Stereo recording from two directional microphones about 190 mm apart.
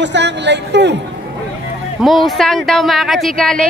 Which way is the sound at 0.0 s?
65° right (ahead or behind).